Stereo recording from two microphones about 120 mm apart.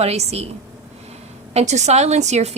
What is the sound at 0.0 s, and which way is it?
Speech, 60° right (ahead or behind).